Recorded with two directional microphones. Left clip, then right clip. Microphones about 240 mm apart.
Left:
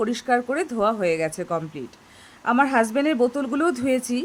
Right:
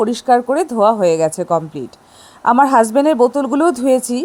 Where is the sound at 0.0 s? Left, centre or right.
Centre.